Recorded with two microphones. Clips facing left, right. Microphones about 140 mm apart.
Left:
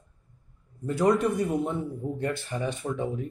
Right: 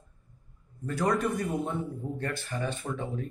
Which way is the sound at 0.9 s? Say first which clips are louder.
Left 5 dB; 20° left (ahead or behind).